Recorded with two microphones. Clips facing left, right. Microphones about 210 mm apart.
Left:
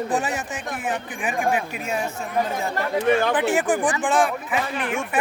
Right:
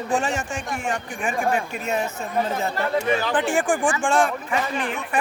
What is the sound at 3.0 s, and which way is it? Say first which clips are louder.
Speech: left 8 dB; 55° left (ahead or behind).